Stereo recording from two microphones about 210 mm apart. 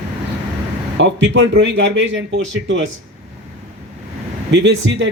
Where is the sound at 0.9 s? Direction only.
60° right (ahead or behind).